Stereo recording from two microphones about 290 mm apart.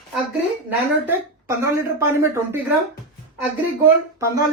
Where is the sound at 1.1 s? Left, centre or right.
Centre.